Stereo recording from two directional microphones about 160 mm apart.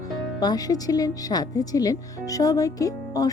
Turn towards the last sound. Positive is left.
turn(degrees=20)  # may be behind; listen again after turning